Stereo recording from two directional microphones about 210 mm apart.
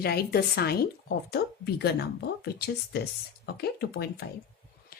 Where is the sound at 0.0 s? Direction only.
45° left (ahead or behind).